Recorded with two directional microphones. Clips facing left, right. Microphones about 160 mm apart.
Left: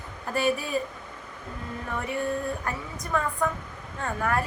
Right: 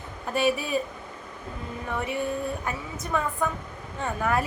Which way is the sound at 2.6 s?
5° right (ahead or behind).